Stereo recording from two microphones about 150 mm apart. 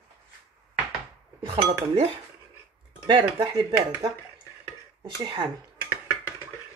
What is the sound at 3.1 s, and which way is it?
Speech, 30° right (ahead or behind).